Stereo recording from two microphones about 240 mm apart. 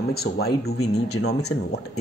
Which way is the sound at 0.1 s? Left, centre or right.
Left.